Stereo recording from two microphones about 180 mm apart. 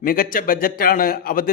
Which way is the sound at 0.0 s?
55° left (ahead or behind).